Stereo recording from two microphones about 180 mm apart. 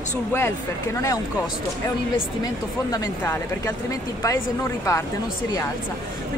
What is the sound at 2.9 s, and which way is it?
Speech, 10° left (ahead or behind).